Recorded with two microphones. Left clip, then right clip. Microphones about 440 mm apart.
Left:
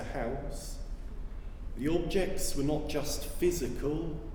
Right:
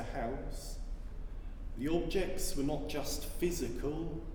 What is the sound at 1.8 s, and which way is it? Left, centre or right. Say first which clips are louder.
Speech: left 3 dB; centre.